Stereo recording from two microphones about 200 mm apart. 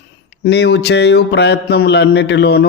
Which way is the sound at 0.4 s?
55° left (ahead or behind).